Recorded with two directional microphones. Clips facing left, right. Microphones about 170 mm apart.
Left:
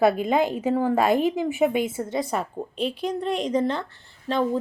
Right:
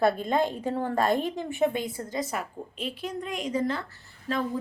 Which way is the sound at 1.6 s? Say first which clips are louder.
Left 3 dB; 20° left (ahead or behind).